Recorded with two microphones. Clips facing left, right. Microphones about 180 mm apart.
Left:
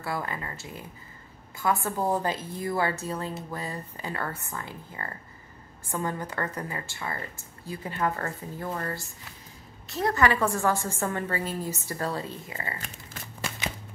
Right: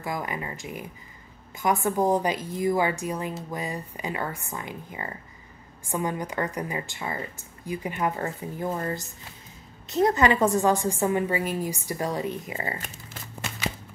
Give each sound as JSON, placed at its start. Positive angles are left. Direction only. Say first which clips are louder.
{"t": 0.0, "sound": "a woman's voice", "louder": "right 2 dB", "side_deg": -15}